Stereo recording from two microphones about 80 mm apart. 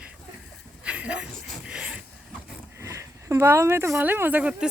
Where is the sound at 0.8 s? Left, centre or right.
Centre.